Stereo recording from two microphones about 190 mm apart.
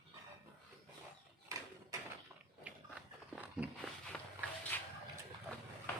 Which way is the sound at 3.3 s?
10° right (ahead or behind).